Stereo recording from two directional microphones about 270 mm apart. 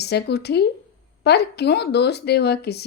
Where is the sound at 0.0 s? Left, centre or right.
Left.